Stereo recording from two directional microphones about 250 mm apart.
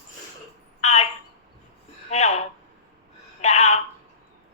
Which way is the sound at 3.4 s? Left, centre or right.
Left.